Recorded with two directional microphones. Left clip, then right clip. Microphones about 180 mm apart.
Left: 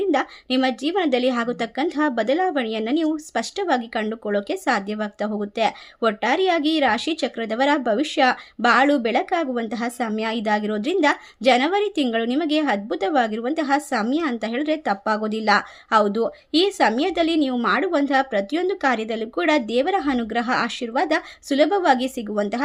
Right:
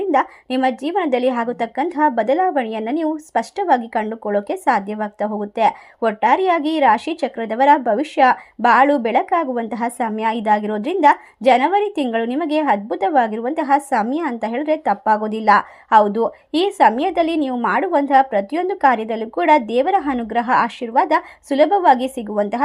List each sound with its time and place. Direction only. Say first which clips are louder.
0.1 s a woman's voice: right 4 dB; 5° left (ahead or behind)